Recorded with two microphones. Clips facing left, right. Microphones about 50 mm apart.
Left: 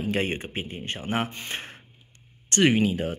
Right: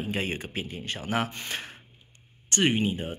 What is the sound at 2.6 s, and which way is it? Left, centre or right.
Speech, left.